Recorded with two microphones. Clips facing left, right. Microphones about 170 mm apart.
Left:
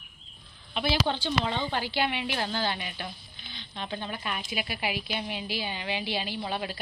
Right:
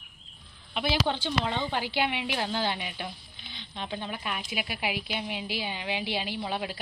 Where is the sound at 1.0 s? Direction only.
10° right (ahead or behind).